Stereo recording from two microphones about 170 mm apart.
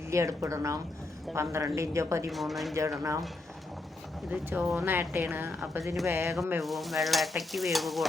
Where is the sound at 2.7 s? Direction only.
15° right (ahead or behind).